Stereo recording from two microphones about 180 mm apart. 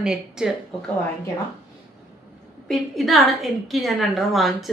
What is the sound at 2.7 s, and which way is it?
A woman's voice, centre (ahead or behind).